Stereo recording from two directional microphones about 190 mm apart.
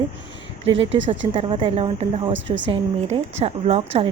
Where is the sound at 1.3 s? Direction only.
30° right (ahead or behind).